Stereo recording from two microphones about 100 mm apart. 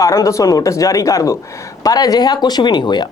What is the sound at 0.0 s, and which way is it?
Speech, 30° left (ahead or behind).